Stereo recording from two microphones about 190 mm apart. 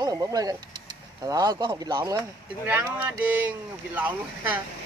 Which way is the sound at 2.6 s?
10° right (ahead or behind).